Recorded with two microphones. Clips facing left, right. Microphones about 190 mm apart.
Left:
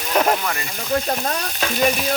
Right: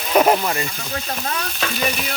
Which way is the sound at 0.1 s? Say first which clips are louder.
Right 4 dB; 10° right (ahead or behind).